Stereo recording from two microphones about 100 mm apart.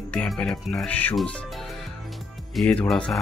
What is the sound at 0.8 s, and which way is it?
Speech, 15° left (ahead or behind).